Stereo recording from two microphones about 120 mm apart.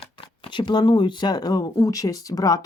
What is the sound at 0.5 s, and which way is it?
Speech, 40° left (ahead or behind).